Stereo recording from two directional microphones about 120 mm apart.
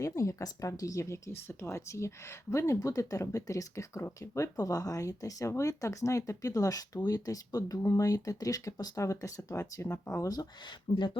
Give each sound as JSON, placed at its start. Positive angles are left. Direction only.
{"t": 0.0, "sound": "speech", "side_deg": 25}